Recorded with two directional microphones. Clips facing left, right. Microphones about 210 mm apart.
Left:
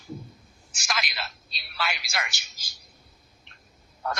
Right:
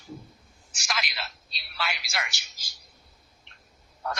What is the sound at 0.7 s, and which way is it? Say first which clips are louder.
Speech: left 1 dB; 50° left (ahead or behind).